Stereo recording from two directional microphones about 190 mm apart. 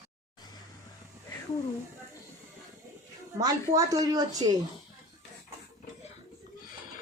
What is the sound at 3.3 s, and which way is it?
A woman's voice, 20° right (ahead or behind).